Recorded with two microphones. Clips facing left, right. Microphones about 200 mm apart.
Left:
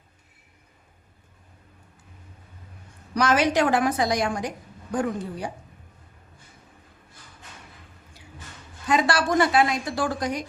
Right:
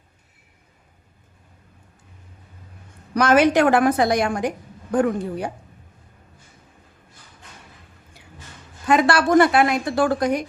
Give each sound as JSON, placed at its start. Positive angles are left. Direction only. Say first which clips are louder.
{"t": 3.2, "sound": "a woman's voice", "louder": "right 5 dB", "side_deg": -55}
{"t": 8.9, "sound": "a woman's voice", "louder": "right 6 dB", "side_deg": -60}